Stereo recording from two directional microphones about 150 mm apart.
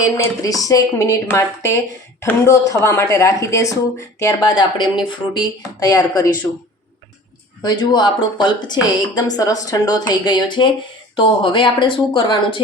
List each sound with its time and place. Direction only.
0.2 s a woman's voice: 20° left (ahead or behind)
7.6 s a woman's voice: 30° left (ahead or behind)